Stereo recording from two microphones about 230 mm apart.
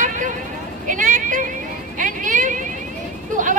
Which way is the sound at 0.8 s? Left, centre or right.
Right.